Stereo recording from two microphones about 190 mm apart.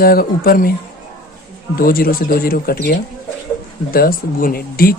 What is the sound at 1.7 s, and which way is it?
Speech, 50° left (ahead or behind).